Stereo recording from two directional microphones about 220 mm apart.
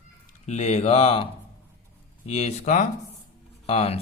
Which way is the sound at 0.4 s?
30° left (ahead or behind).